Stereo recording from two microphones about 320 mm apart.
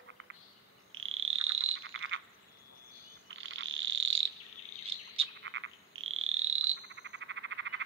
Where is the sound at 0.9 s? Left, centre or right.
Right.